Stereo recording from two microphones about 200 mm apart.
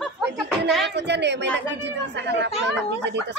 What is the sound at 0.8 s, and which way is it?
A child's voice, 60° right (ahead or behind).